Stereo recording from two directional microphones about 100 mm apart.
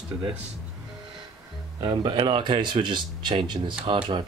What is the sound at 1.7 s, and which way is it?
Speech, 50° right (ahead or behind).